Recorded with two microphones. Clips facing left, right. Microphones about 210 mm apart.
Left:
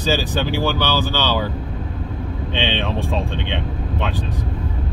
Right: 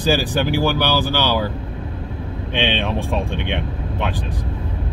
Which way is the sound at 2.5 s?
15° right (ahead or behind).